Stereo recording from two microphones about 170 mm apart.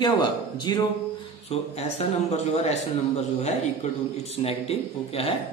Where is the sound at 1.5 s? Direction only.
40° left (ahead or behind).